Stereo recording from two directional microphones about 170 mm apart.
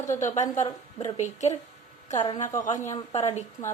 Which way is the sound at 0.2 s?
45° left (ahead or behind).